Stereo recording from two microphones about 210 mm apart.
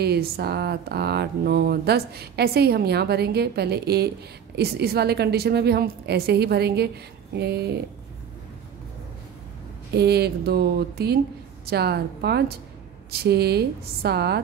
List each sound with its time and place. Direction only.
0.0 s speech: 50° right (ahead or behind)
9.9 s speech: 50° right (ahead or behind)